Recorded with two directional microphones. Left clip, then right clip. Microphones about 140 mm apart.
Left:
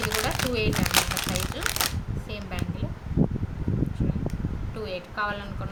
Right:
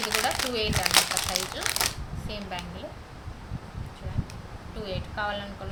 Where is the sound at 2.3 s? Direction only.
10° left (ahead or behind).